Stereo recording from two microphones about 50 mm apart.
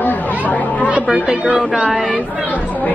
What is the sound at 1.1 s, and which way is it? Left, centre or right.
Speech, centre.